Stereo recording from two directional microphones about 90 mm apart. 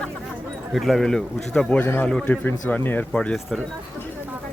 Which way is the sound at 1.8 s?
20° left (ahead or behind).